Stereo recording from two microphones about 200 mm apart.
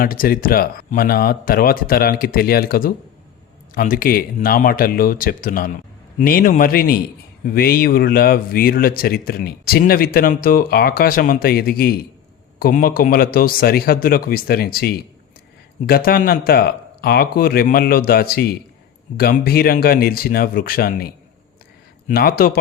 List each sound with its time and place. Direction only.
0.0 s speech: 45° left (ahead or behind)